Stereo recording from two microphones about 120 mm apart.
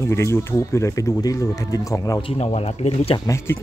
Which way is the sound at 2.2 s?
45° left (ahead or behind).